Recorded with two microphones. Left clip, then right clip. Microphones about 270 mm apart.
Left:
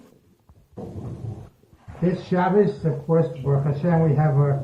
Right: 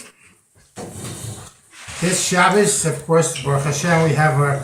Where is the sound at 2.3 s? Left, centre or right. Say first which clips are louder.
Right 5 dB; centre.